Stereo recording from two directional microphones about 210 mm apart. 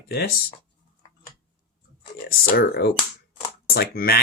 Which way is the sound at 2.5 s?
50° left (ahead or behind).